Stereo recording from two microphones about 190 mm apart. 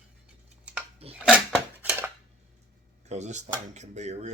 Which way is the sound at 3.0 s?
35° right (ahead or behind).